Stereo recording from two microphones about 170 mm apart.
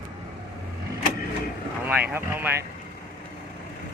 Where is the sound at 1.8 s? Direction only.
10° right (ahead or behind).